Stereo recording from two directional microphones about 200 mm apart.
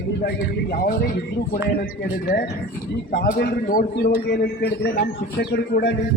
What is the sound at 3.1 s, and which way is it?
A man's voice, 50° left (ahead or behind).